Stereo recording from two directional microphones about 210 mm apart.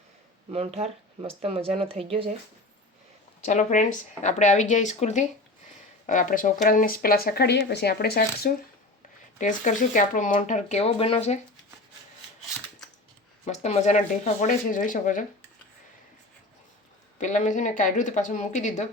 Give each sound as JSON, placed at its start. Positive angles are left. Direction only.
{"t": 0.5, "sound": "speech", "side_deg": -30}
{"t": 3.4, "sound": "speech", "side_deg": 35}
{"t": 13.4, "sound": "speech", "side_deg": 30}
{"t": 17.2, "sound": "speech", "side_deg": 35}